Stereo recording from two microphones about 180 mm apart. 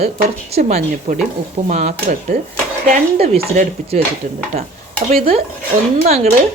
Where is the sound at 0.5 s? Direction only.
35° right (ahead or behind).